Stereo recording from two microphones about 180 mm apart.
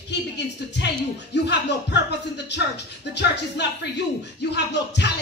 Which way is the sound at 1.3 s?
70° left (ahead or behind).